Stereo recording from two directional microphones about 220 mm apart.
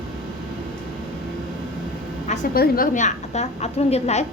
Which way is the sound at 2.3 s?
40° left (ahead or behind).